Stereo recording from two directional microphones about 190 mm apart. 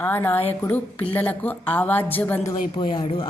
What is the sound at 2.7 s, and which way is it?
Speech, 25° left (ahead or behind).